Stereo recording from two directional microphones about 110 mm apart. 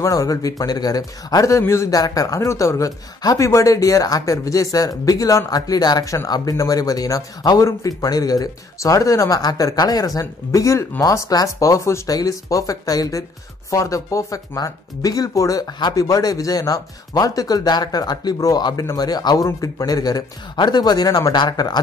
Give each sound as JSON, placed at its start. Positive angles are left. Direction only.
{"t": 0.0, "sound": "speech", "side_deg": 30}